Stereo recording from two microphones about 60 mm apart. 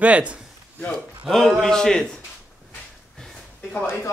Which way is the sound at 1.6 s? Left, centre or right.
Centre.